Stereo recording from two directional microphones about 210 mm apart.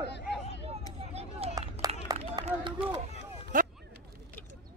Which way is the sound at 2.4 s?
25° right (ahead or behind).